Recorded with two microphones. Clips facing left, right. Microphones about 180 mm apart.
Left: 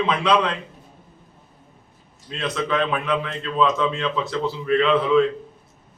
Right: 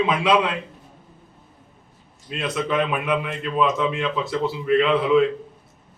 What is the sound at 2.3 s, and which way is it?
A man's voice, 5° right (ahead or behind).